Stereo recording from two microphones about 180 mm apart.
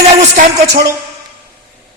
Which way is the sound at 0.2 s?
50° right (ahead or behind).